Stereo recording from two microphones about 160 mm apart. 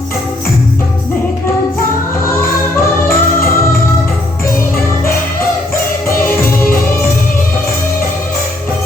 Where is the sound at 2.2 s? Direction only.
15° left (ahead or behind).